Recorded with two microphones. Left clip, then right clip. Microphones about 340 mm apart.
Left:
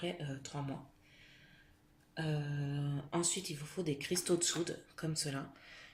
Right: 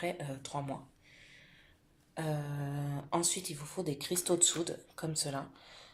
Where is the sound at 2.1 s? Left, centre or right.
Right.